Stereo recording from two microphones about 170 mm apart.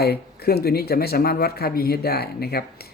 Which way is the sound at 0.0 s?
65° left (ahead or behind).